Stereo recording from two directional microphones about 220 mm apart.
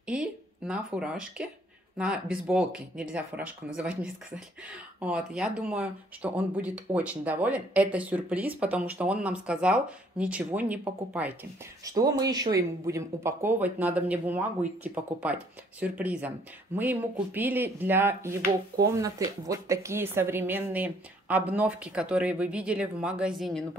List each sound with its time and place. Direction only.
0.0 s speech: 5° right (ahead or behind)